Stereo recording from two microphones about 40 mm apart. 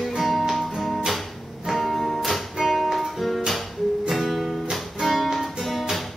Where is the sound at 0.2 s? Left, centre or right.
Centre.